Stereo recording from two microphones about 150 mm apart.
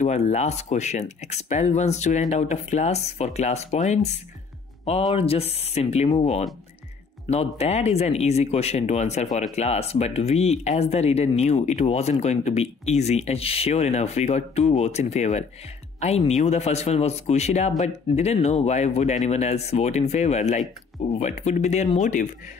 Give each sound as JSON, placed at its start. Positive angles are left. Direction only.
{"t": 0.0, "sound": "speech", "side_deg": 45}
{"t": 7.2, "sound": "speech", "side_deg": 45}